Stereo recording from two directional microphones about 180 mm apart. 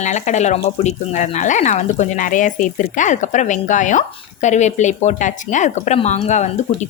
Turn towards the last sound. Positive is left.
turn(degrees=40)  # may be behind; listen again after turning